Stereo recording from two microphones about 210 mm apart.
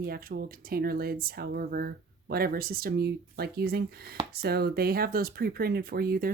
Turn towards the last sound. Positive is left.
turn(degrees=-45)  # may be behind; listen again after turning